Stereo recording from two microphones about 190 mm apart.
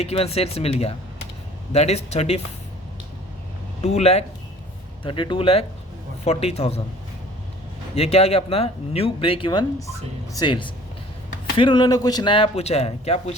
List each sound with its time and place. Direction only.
0.0 s speech: 30° left (ahead or behind)
3.8 s a man's voice: 35° left (ahead or behind)
7.9 s a man's voice: 35° left (ahead or behind)